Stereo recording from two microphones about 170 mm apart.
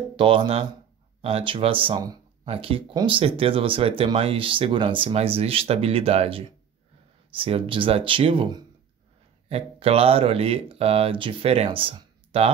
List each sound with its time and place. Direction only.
0.1 s speech: 30° right (ahead or behind)